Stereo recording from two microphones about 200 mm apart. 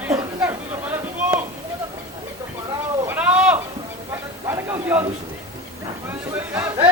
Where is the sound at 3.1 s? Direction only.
5° right (ahead or behind).